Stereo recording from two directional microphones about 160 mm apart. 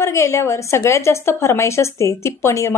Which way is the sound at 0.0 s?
20° left (ahead or behind).